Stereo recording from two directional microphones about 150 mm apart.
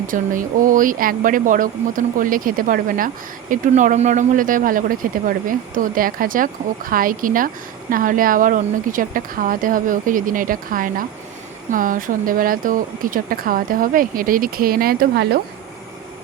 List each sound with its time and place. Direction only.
0.1 s speech: 65° right (ahead or behind); by 15.4 s 90° right